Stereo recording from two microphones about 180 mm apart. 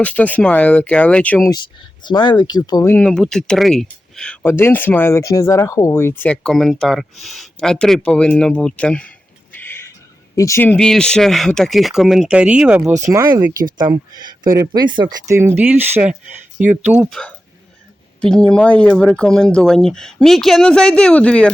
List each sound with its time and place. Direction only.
0.0 s speech: 10° left (ahead or behind)
2.0 s speech: 25° left (ahead or behind)
2.9 s speech: 5° left (ahead or behind)
13.0 s speech: 15° right (ahead or behind)
17.0 s speech: 5° left (ahead or behind)